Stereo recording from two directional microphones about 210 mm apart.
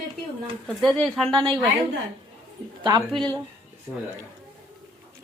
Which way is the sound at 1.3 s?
20° right (ahead or behind).